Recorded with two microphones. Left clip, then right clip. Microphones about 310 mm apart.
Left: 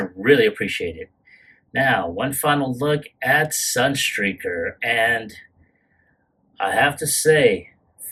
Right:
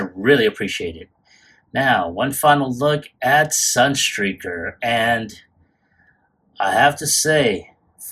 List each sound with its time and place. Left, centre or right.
0.0 s speech: centre
6.5 s speech: centre